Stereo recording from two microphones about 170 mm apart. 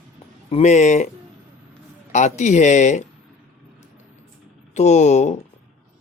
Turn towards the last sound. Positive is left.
turn(degrees=40)  # may be behind; listen again after turning